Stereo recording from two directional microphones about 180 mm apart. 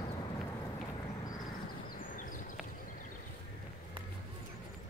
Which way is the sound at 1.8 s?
50° left (ahead or behind).